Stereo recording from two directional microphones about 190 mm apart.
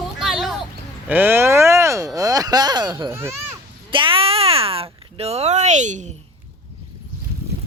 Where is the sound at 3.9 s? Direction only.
25° right (ahead or behind).